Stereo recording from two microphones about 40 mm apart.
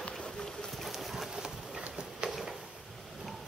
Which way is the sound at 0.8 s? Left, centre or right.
Centre.